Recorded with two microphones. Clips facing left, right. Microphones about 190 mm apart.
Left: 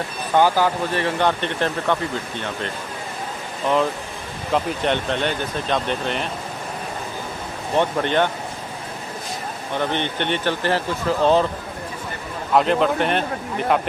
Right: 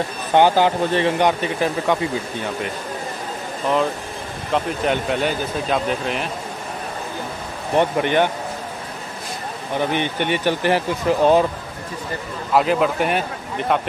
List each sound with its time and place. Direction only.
0.3 s speech: 25° right (ahead or behind)
1.4 s speech: 5° right (ahead or behind)
4.5 s speech: centre (ahead or behind)
7.7 s speech: 15° right (ahead or behind)
9.8 s speech: 10° right (ahead or behind)
12.5 s speech: 5° right (ahead or behind)